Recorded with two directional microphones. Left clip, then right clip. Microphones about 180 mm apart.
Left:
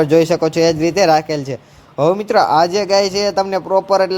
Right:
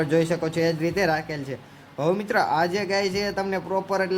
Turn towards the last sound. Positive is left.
turn(degrees=30)  # may be behind; listen again after turning